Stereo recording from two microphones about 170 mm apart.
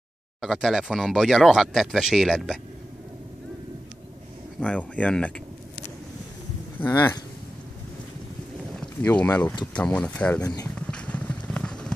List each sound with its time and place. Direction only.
0.4 s speech: centre (ahead or behind)
4.6 s speech: 5° left (ahead or behind)
6.8 s speech: 15° left (ahead or behind)
8.7 s speech: 10° left (ahead or behind)
10.4 s speech: 20° left (ahead or behind)
10.7 s clip-clop: 5° left (ahead or behind)